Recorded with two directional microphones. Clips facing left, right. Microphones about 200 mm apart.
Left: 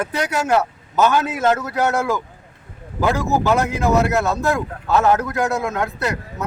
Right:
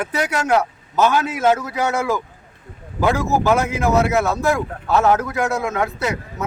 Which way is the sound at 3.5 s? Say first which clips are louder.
Left 1 dB; centre (ahead or behind).